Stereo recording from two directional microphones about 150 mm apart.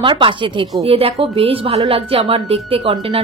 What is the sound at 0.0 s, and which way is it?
Speech, 35° right (ahead or behind).